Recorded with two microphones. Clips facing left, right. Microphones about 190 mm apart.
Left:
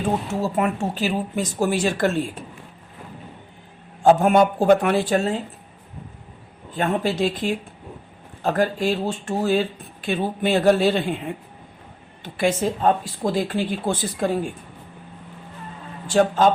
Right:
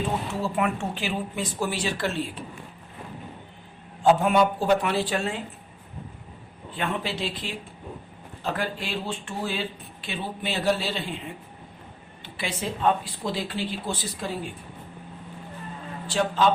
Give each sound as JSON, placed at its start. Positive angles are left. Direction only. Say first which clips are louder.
{"t": 0.4, "sound": "speech", "louder": "left 3 dB", "side_deg": 40}
{"t": 4.0, "sound": "speech", "louder": "left 4 dB", "side_deg": 45}
{"t": 6.7, "sound": "speech", "louder": "left 7 dB", "side_deg": 45}
{"t": 16.0, "sound": "speech", "louder": "left 6 dB", "side_deg": 45}